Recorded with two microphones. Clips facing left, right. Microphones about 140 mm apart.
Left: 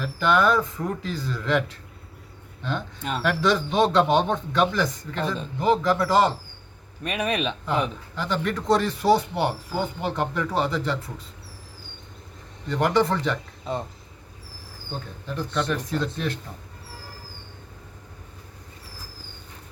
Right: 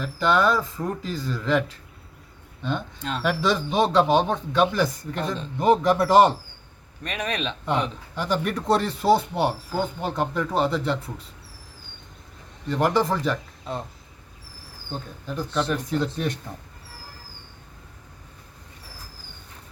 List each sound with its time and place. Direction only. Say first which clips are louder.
0.0 s speech: even; centre (ahead or behind)
2.6 s speech: right 1 dB; centre (ahead or behind)
5.2 s a man's voice: left 1 dB; 5° left (ahead or behind)
5.5 s speech: right 3 dB; 20° right (ahead or behind)
7.0 s speech: left 3 dB; 5° left (ahead or behind)
8.1 s speech: right 3 dB; 10° right (ahead or behind)
10.1 s speech: right 1 dB; centre (ahead or behind)
12.6 s speech: even; 5° right (ahead or behind)
15.3 s speech: right 1 dB; 5° right (ahead or behind)